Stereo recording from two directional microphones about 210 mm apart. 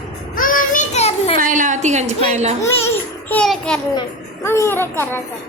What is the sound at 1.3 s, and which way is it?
A woman's voice, 40° right (ahead or behind).